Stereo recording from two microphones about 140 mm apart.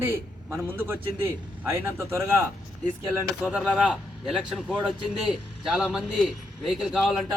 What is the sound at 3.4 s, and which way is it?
A man's voice, 10° right (ahead or behind).